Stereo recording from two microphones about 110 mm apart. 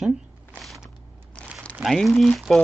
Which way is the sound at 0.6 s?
Centre (ahead or behind).